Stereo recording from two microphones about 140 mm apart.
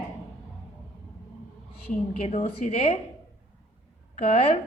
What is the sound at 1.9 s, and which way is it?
A woman's voice, 50° left (ahead or behind).